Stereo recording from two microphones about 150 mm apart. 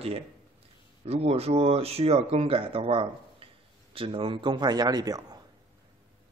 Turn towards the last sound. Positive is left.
turn(degrees=-25)  # may be behind; listen again after turning